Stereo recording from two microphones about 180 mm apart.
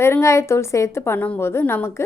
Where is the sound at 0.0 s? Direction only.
15° left (ahead or behind).